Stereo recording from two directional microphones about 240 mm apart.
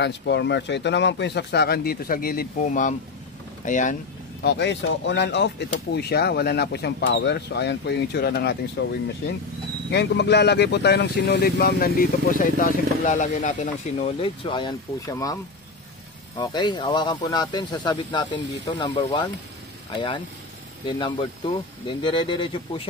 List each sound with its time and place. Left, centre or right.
0.0 s speech: left
4.4 s speech: left
9.8 s speech: left